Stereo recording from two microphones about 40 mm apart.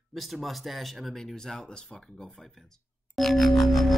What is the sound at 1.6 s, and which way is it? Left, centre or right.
Speech, left.